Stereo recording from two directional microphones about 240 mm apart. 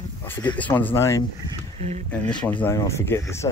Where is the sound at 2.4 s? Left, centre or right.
Centre.